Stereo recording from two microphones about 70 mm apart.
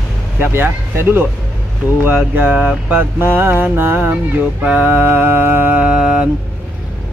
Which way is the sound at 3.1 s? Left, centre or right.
Right.